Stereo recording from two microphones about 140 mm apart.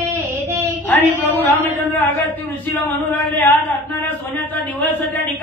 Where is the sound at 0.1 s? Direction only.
20° right (ahead or behind).